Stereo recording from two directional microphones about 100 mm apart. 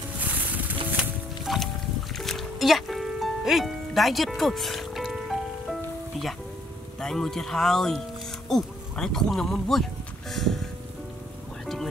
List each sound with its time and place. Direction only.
0.2 s music: 15° right (ahead or behind)
1.4 s music: centre (ahead or behind)
7.0 s speech: 5° left (ahead or behind)
10.3 s a sound: 5° left (ahead or behind)
11.6 s music: 5° left (ahead or behind)